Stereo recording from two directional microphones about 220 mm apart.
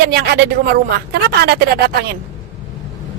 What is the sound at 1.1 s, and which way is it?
A woman's voice, 45° right (ahead or behind).